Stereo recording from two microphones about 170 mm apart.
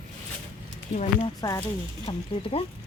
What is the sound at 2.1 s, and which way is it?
Speech, 35° left (ahead or behind).